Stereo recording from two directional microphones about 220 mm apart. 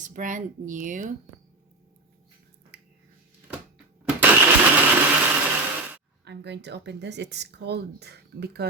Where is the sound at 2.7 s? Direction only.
50° right (ahead or behind).